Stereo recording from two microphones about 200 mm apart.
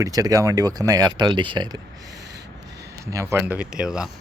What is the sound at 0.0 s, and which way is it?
Speech, 15° right (ahead or behind).